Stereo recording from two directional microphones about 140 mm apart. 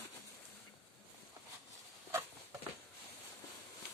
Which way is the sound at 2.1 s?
20° right (ahead or behind).